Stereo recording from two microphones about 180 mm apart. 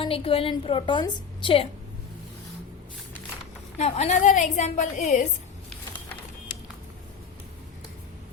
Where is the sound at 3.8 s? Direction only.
40° left (ahead or behind).